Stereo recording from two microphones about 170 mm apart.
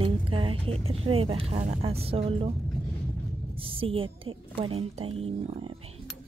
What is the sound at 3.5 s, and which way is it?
Speech, 35° right (ahead or behind).